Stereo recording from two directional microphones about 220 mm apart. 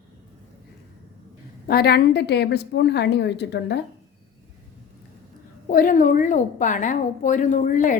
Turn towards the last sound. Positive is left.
turn(degrees=35)  # may be behind; listen again after turning